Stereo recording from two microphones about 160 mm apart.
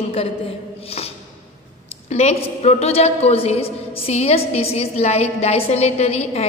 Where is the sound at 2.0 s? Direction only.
40° left (ahead or behind).